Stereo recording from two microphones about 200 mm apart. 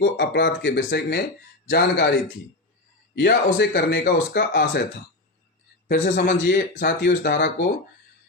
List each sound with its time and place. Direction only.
0.0 s speech: 60° left (ahead or behind)
5.9 s speech: 45° left (ahead or behind)
6.3 s speech: 55° left (ahead or behind)